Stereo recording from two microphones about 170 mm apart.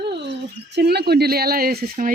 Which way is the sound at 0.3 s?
80° right.